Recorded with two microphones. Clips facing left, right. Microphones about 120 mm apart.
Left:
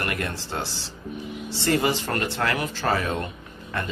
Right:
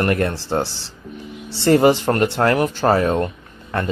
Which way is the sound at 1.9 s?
55° right (ahead or behind).